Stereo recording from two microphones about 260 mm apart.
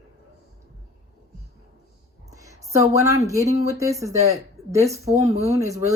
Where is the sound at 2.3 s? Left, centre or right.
Centre.